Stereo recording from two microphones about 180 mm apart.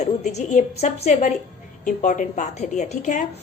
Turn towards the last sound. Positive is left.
turn(degrees=45)  # may be behind; listen again after turning